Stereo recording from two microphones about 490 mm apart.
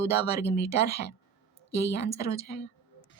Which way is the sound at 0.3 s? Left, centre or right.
Centre.